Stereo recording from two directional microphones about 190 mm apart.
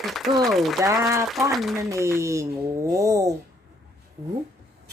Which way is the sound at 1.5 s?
Centre (ahead or behind).